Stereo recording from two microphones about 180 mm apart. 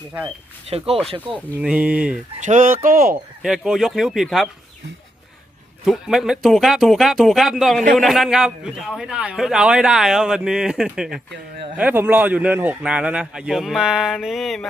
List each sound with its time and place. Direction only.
0.7 s speech: 35° right (ahead or behind)
1.5 s a man's voice: 5° right (ahead or behind)
2.4 s speech: 45° right (ahead or behind)
3.4 s a man's voice: 5° right (ahead or behind)
5.8 s a man's voice: centre (ahead or behind)